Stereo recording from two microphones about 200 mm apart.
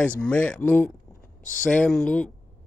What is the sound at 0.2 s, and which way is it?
Speech, 5° left (ahead or behind).